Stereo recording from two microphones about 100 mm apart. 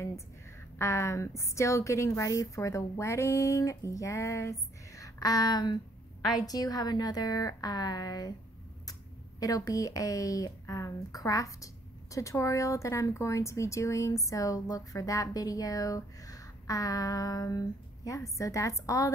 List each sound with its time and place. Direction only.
0.7 s speech: 30° left (ahead or behind)
9.4 s speech: 35° left (ahead or behind)